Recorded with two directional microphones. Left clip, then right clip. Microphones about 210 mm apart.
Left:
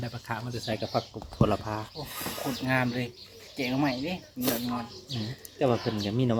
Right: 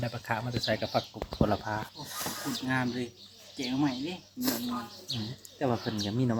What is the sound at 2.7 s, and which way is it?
Speech, 40° left (ahead or behind).